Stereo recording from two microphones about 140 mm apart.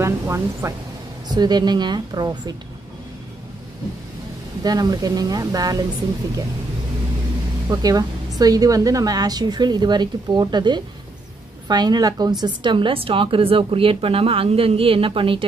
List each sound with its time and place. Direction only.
0.0 s a woman's voice: 20° right (ahead or behind)
4.6 s a woman's voice: 25° right (ahead or behind)
7.7 s a woman's voice: 25° right (ahead or behind)